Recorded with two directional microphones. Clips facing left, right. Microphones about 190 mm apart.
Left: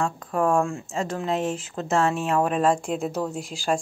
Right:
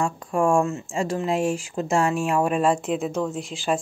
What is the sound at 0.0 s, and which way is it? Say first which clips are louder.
Speech: right 2 dB; 10° right (ahead or behind).